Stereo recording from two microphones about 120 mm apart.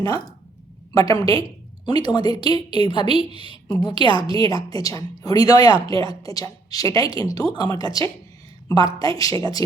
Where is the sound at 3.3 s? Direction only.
45° right (ahead or behind).